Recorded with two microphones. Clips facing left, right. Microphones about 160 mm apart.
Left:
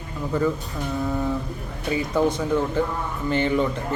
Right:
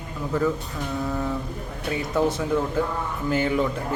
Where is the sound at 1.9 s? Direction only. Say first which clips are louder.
Left 2 dB; centre (ahead or behind).